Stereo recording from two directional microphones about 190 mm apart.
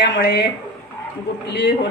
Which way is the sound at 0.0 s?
60° left (ahead or behind).